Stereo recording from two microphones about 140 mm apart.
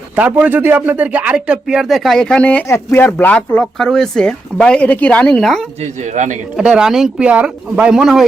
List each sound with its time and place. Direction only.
0.2 s a man's voice: 10° right (ahead or behind)
5.8 s a man's voice: 60° right (ahead or behind)
6.6 s speech: 5° right (ahead or behind)